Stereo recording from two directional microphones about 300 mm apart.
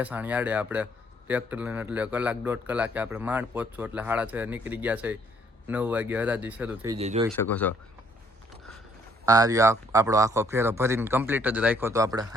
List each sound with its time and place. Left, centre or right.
0.0 s a man's voice: centre
7.0 s speech: right
7.3 s a man's voice: centre
9.2 s speech: centre